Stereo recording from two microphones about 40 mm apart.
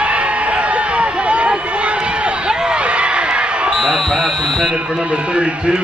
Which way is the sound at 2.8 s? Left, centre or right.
Right.